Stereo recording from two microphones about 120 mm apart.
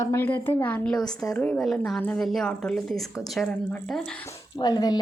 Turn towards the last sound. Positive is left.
turn(degrees=35)  # may be behind; listen again after turning